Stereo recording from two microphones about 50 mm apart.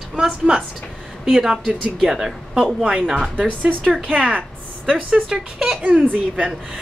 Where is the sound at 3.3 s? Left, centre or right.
Right.